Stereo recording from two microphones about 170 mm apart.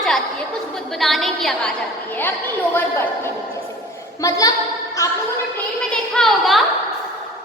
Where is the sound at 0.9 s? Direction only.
Centre (ahead or behind).